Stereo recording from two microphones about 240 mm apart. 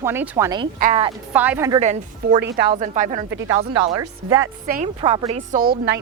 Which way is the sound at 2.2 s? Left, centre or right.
Right.